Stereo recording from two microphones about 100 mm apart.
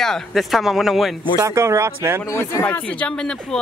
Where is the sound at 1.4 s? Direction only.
30° right (ahead or behind).